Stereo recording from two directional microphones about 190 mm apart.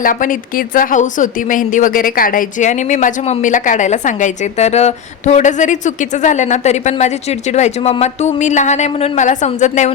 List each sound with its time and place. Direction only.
0.0 s a woman's voice: 45° left (ahead or behind)